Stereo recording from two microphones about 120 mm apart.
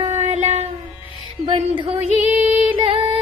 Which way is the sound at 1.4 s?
45° right (ahead or behind).